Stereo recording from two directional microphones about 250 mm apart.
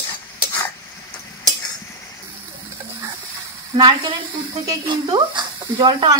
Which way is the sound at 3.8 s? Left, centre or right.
Centre.